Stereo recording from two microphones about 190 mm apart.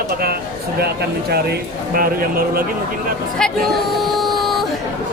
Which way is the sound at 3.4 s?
Centre (ahead or behind).